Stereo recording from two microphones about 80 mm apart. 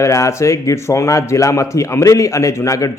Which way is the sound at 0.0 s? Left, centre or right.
Left.